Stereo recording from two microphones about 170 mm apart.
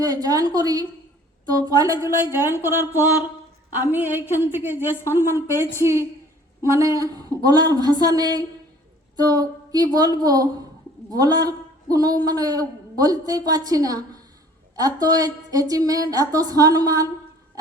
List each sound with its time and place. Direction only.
0.0 s a man's voice: 20° right (ahead or behind)